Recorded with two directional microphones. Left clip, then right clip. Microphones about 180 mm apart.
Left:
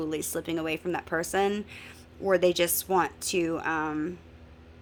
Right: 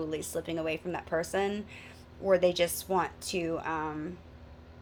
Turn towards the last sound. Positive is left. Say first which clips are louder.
# left 5 dB
turn(degrees=45)  # may be behind; listen again after turning